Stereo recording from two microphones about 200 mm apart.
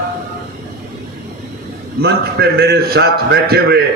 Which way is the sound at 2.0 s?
55° right (ahead or behind).